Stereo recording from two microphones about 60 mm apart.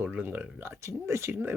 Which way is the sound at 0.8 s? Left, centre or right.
Right.